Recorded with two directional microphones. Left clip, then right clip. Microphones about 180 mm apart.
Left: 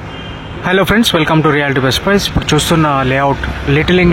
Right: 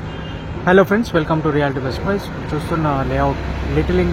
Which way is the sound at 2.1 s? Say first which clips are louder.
Left 7 dB; 35° left (ahead or behind).